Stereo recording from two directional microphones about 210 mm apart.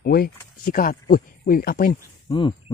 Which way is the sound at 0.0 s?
45° left (ahead or behind).